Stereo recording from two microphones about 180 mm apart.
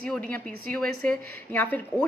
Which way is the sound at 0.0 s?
5° left (ahead or behind).